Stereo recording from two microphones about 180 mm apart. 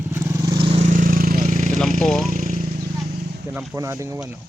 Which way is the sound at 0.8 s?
45° right (ahead or behind).